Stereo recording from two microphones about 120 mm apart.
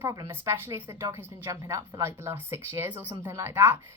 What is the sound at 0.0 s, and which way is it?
A woman's voice, 20° right (ahead or behind).